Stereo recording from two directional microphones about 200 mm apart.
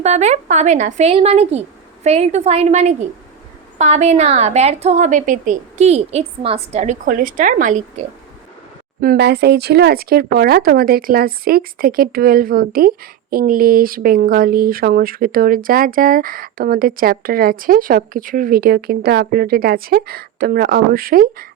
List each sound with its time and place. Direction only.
0.0 s a woman's voice: 35° right (ahead or behind)
9.0 s speech: 50° right (ahead or behind)